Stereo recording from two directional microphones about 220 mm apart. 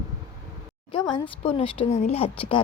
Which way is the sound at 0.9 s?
20° left (ahead or behind).